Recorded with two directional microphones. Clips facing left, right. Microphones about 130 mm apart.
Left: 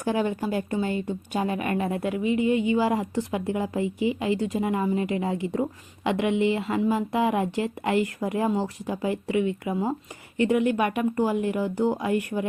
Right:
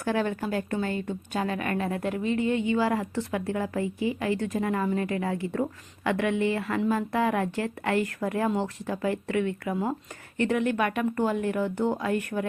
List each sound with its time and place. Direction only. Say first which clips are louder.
0.0 s a woman's voice: left 2 dB; 15° left (ahead or behind)